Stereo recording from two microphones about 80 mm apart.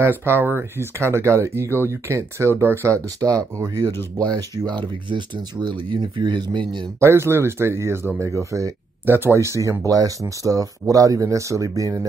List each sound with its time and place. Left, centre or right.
0.0 s speech: right
4.3 s speech: right
7.0 s speech: right
9.0 s speech: right